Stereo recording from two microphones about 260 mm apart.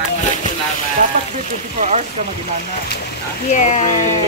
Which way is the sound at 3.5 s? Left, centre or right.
Left.